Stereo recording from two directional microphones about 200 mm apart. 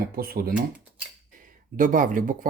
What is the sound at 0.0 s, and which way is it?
Speech, 50° right (ahead or behind).